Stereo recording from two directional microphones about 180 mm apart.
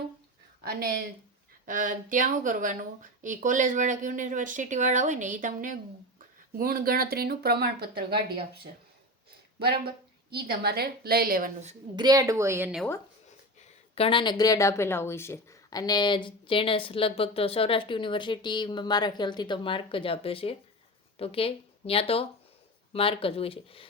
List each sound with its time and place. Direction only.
0.7 s speech: 60° right (ahead or behind)
1.6 s speech: 50° right (ahead or behind)
9.6 s a sound: 60° right (ahead or behind)
10.4 s speech: 60° right (ahead or behind)
11.9 s speech: 20° right (ahead or behind)
13.9 s speech: 30° left (ahead or behind)